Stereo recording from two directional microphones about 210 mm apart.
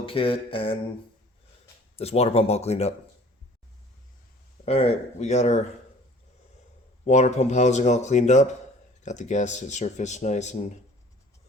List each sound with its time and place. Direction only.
0.0 s speech: 25° left (ahead or behind)
2.0 s speech: 30° left (ahead or behind)
4.6 s speech: 30° left (ahead or behind)
7.0 s speech: 35° left (ahead or behind)